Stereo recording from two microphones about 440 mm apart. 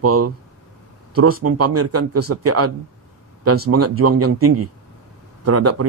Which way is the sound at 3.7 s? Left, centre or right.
Right.